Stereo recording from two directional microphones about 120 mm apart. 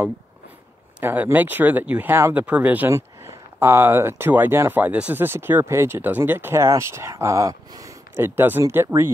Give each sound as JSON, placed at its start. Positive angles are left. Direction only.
{"t": 1.0, "sound": "speech", "side_deg": -15}